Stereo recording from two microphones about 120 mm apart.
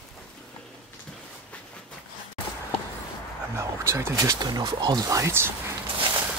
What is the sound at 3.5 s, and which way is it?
Speech, 20° right (ahead or behind).